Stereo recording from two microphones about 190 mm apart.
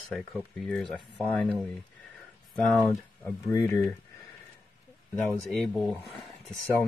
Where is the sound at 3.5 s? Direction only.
15° left (ahead or behind).